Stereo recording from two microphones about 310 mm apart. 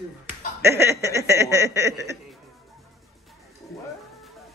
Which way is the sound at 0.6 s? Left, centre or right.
Centre.